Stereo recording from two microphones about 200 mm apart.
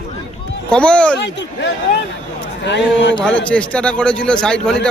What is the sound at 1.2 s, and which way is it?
Speech, 60° left (ahead or behind).